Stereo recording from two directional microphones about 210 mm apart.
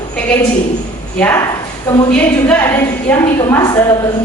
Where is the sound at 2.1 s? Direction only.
10° left (ahead or behind).